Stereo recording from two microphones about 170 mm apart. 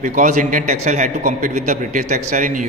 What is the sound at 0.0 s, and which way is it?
Speech, 45° right (ahead or behind).